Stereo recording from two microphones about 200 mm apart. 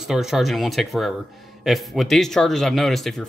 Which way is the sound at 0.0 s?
Centre (ahead or behind).